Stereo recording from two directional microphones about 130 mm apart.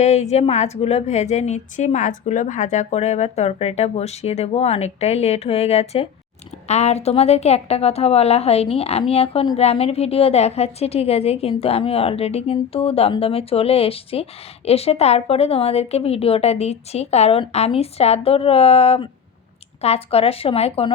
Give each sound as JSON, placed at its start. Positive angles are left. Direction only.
{"t": 0.0, "sound": "a woman's voice", "side_deg": 60}